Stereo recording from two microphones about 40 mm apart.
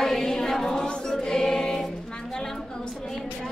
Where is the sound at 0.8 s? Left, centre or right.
Centre.